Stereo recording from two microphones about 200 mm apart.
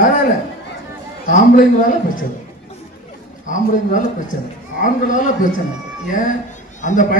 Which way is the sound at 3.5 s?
40° left (ahead or behind).